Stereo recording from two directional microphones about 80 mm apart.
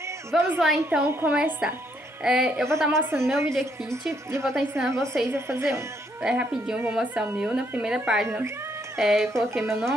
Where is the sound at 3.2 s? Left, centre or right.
Right.